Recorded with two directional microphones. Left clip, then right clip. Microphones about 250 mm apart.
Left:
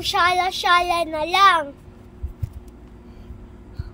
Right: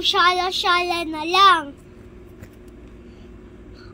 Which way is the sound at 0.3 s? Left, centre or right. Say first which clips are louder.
Left 1 dB; left.